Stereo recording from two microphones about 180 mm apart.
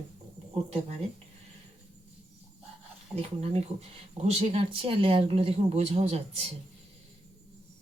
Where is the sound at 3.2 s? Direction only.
35° right (ahead or behind).